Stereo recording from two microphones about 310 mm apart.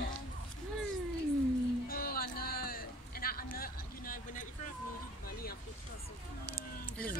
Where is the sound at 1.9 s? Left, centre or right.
Left.